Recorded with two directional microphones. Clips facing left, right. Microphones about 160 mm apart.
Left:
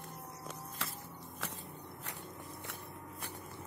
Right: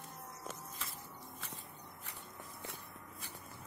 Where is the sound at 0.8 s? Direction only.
80° left.